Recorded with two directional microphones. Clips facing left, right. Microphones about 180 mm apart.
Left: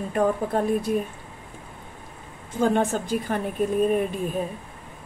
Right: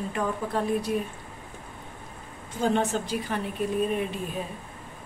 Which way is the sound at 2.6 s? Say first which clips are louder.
Left 3 dB; 50° left (ahead or behind).